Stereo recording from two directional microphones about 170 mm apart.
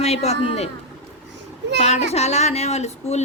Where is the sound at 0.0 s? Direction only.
40° left (ahead or behind).